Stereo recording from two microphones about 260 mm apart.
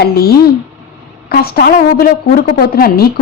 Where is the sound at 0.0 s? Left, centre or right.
Left.